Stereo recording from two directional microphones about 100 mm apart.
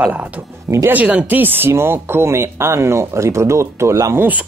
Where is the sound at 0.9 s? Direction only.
15° right (ahead or behind).